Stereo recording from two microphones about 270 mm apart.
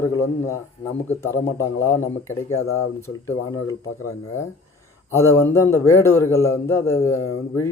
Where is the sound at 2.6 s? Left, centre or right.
Left.